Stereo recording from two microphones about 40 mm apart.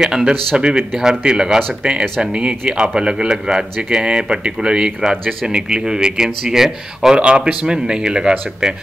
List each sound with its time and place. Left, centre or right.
0.0 s a man's voice: centre
7.2 s speech: right